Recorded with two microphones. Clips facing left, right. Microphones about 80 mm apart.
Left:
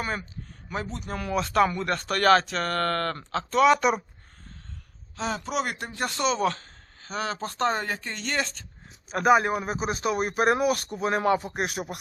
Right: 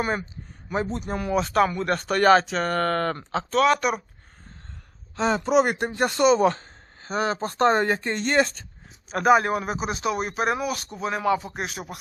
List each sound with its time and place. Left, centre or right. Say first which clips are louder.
0.7 s speech: right 6 dB; right
1.3 s speech: right 1 dB; centre
3.5 s speech: left 1 dB; centre
5.1 s speech: right 8 dB; right
6.2 s speech: right 7 dB; centre
6.5 s a sound: right 4 dB; right
7.4 s speech: right 7 dB; right
9.2 s speech: right 2 dB; centre
9.7 s speech: even; left
10.1 s speech: even; centre
10.3 s speech: left 3 dB; left
11.4 s speech: left 2 dB; centre